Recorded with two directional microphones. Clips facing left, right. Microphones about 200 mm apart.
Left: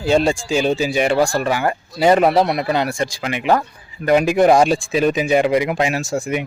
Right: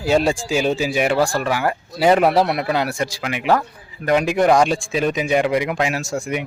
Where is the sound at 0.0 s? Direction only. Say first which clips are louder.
Left 1 dB; 5° right (ahead or behind).